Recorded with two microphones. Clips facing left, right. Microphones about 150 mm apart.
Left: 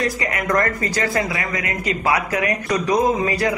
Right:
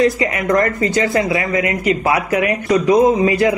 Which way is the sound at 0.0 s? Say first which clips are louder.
Right 7 dB; 25° right (ahead or behind).